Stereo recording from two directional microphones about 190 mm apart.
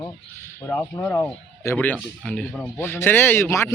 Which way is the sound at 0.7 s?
10° left (ahead or behind).